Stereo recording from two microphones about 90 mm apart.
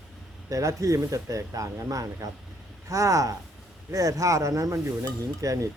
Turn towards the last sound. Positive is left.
turn(degrees=-35)  # may be behind; listen again after turning